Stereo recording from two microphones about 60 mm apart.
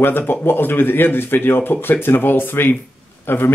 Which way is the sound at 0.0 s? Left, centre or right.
Left.